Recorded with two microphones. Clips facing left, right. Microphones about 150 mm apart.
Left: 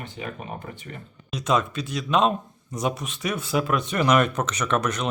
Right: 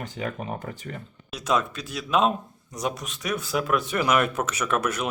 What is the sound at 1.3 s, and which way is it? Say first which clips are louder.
Speech: left 2 dB; centre (ahead or behind).